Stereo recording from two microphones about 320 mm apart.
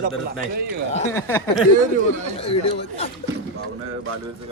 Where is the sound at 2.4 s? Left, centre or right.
Centre.